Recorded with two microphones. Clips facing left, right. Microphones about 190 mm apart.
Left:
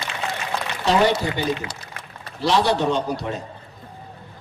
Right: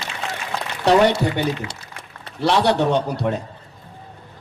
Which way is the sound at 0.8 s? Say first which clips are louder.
Right 4 dB; 60° right (ahead or behind).